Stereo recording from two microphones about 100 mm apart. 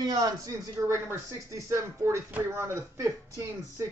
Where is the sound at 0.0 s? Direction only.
40° right (ahead or behind).